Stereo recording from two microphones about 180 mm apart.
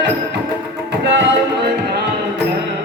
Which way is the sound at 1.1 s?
80° right.